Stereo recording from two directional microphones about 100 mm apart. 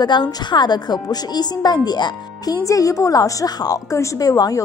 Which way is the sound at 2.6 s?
35° left (ahead or behind).